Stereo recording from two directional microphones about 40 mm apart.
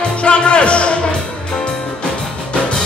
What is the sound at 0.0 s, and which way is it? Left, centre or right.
Music, left.